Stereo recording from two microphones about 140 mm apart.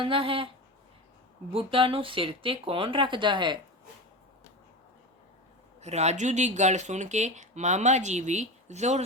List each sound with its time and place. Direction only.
0.0 s speech: 40° right (ahead or behind)
1.5 s speech: 40° right (ahead or behind)
5.8 s speech: 50° right (ahead or behind)